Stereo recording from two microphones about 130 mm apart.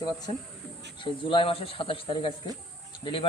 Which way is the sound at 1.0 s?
40° left (ahead or behind).